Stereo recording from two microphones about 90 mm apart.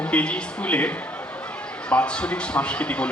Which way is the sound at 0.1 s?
15° left (ahead or behind).